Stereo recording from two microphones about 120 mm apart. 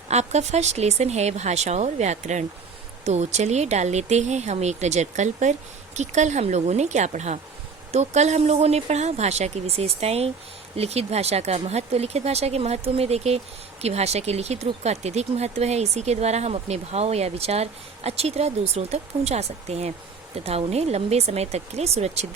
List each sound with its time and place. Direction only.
0.1 s speech: 65° right (ahead or behind)